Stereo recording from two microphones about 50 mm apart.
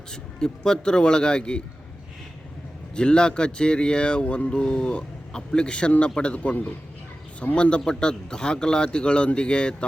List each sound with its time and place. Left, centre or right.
0.1 s speech: centre
2.9 s speech: centre